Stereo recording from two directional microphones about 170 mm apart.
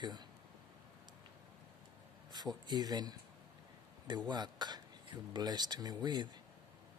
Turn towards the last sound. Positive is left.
turn(degrees=-25)  # may be behind; listen again after turning